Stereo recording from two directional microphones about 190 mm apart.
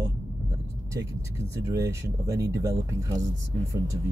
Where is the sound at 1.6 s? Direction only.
15° right (ahead or behind).